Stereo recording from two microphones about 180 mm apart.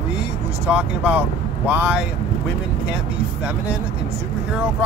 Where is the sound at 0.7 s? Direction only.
5° right (ahead or behind).